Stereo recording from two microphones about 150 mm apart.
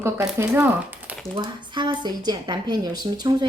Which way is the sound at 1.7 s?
30° right (ahead or behind).